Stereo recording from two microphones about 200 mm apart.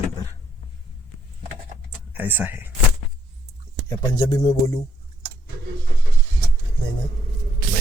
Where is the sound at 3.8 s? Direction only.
15° left (ahead or behind).